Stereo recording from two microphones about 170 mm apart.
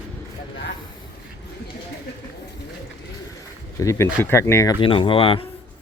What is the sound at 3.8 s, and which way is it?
Speech, 15° left (ahead or behind).